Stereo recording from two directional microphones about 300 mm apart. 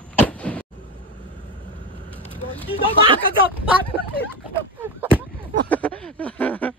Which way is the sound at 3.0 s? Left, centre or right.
Centre.